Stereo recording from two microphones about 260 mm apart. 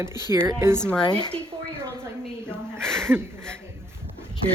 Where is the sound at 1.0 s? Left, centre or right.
Centre.